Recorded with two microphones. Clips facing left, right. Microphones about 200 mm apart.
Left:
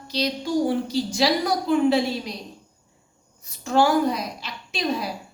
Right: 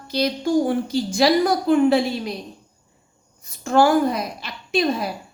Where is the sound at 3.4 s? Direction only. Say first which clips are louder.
Right 3 dB; 50° right (ahead or behind).